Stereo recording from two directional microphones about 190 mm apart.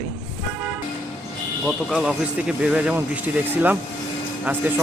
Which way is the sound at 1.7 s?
5° right (ahead or behind).